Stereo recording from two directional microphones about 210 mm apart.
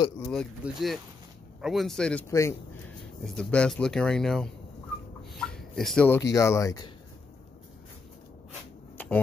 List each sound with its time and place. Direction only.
0.3 s speech: centre (ahead or behind)
3.0 s speech: centre (ahead or behind)
8.9 s a sound: 5° left (ahead or behind)